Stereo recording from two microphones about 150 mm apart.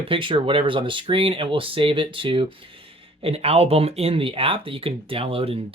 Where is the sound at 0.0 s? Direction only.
35° right (ahead or behind).